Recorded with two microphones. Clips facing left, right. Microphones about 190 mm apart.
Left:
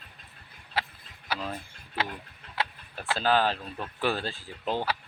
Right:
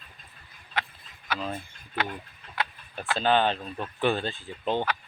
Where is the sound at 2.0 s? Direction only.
30° left (ahead or behind).